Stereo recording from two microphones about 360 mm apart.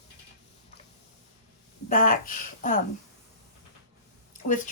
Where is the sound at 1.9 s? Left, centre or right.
Left.